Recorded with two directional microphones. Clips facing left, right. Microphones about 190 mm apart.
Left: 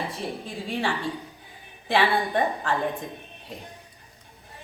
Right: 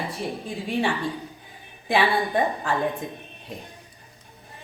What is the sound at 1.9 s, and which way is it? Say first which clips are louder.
Speech: right 1 dB; 15° right (ahead or behind).